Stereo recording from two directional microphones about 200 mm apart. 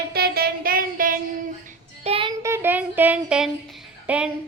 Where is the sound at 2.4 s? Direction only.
10° right (ahead or behind).